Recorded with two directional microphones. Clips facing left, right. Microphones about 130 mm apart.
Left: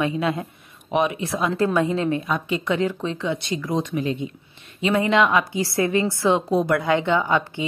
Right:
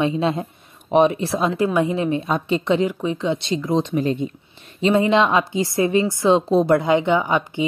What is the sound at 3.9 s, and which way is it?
Speech, 40° right (ahead or behind).